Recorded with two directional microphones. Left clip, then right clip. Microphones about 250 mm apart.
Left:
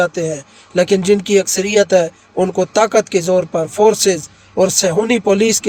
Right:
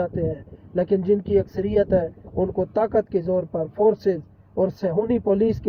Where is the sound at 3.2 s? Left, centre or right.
Left.